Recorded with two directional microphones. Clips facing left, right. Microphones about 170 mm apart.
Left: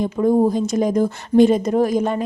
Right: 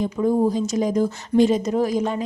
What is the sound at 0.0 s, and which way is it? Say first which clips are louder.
Speech: left 3 dB; 50° left (ahead or behind).